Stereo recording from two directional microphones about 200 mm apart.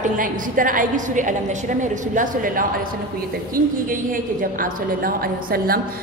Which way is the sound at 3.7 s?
45° right (ahead or behind).